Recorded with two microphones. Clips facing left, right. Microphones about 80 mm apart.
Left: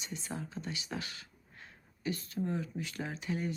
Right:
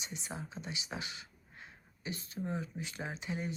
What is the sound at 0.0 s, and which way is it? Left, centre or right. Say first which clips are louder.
A woman's voice: left 3 dB; centre.